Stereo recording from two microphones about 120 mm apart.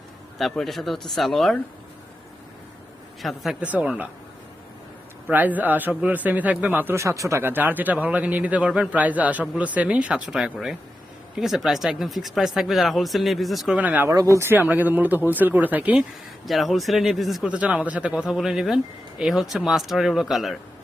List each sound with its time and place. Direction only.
0.3 s speech: centre (ahead or behind)
3.2 s a man's voice: centre (ahead or behind)
5.3 s a man's voice: 15° right (ahead or behind)
13.7 s a man's voice: 15° right (ahead or behind)
14.1 s a man's voice: 25° right (ahead or behind)
16.5 s speech: centre (ahead or behind)
17.5 s speech: 10° right (ahead or behind)